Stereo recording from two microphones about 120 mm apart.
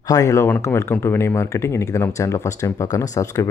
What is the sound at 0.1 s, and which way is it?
Speech, 25° left (ahead or behind).